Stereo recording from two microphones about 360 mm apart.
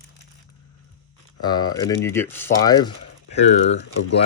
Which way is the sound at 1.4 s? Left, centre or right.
Centre.